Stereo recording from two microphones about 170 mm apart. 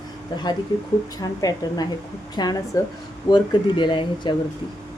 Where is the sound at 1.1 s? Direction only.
20° left (ahead or behind).